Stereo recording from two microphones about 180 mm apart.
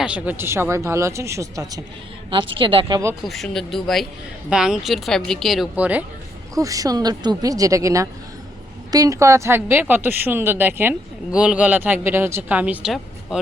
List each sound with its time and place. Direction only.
0.0 s speech: 10° right (ahead or behind)
2.3 s speech: 30° right (ahead or behind)
2.9 s speech: 15° right (ahead or behind)
3.2 s speech: centre (ahead or behind)
6.5 s speech: 20° right (ahead or behind); by 13.4 s 5° right (ahead or behind)